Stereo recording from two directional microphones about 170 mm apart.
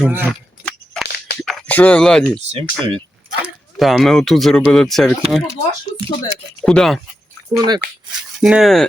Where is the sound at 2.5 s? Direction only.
30° right (ahead or behind).